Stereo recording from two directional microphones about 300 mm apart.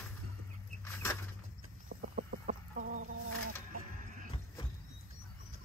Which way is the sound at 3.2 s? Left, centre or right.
Right.